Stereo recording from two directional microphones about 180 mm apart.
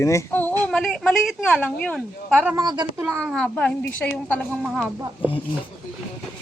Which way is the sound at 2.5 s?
25° right (ahead or behind).